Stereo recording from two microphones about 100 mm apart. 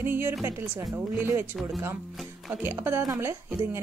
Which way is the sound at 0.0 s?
20° right (ahead or behind).